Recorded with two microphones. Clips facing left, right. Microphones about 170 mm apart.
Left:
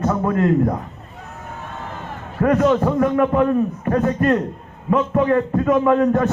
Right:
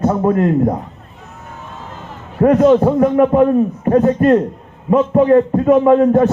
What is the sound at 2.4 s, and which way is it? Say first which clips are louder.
A man's voice: right 6 dB; 30° right (ahead or behind).